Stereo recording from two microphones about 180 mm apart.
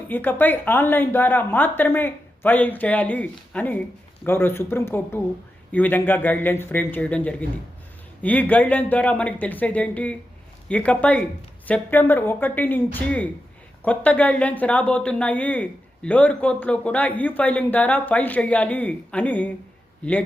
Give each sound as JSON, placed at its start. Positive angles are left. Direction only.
{"t": 0.1, "sound": "speech", "side_deg": 10}